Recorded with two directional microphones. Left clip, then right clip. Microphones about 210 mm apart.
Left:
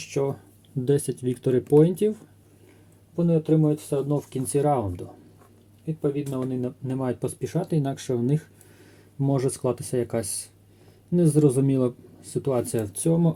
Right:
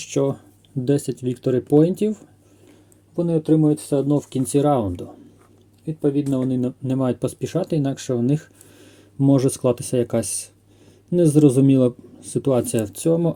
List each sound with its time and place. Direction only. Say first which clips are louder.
0.1 s speech: right 5 dB; 40° right (ahead or behind)
0.9 s speech: right 2 dB; 20° right (ahead or behind)
3.2 s speech: right 4 dB; 50° right (ahead or behind); by 13.3 s 25° right (ahead or behind)